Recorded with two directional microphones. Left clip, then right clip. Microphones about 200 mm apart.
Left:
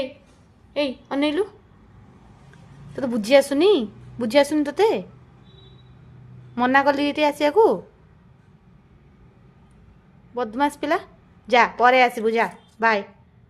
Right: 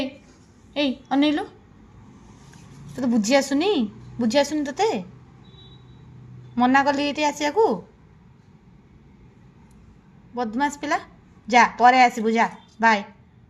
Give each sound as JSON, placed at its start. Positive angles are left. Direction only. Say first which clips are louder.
{"t": 0.7, "sound": "a woman's voice", "louder": "right 1 dB", "side_deg": 20}
{"t": 2.9, "sound": "a woman's voice", "louder": "left 3 dB", "side_deg": 25}
{"t": 6.6, "sound": "a woman's voice", "louder": "left 1 dB", "side_deg": 25}
{"t": 10.3, "sound": "a woman's voice", "louder": "left 2 dB", "side_deg": 25}